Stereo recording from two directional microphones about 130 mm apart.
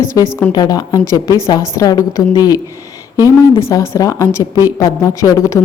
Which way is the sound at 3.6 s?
20° left (ahead or behind).